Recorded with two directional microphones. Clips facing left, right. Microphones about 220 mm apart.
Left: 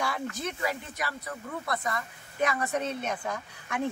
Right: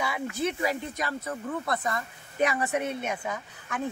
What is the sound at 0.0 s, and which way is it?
Speech, 10° right (ahead or behind).